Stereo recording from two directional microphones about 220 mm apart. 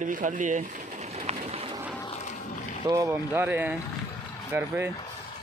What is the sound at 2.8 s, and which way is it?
Speech, 15° right (ahead or behind).